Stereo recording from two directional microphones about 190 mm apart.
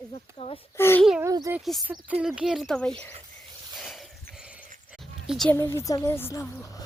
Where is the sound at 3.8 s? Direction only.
Centre (ahead or behind).